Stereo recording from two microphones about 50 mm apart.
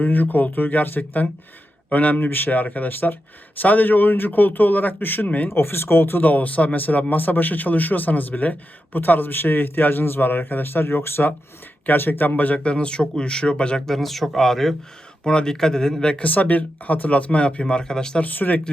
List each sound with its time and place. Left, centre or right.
0.0 s speech: left
5.5 s speech: left
6.2 s speech: left
12.5 s speech: centre
13.8 s speech: centre
15.2 s speech: centre
16.2 s speech: left; by 18.2 s centre
18.2 s speech: left